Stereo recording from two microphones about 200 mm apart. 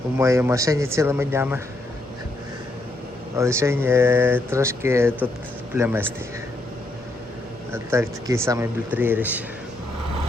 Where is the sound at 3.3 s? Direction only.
15° right (ahead or behind).